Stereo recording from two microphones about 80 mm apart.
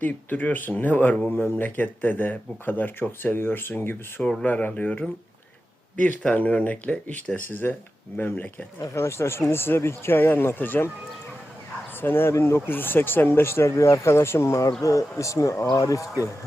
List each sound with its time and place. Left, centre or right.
0.0 s speech: left
8.8 s speech: left
11.9 s speech: left